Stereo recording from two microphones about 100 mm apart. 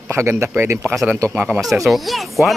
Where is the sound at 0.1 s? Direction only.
25° right (ahead or behind).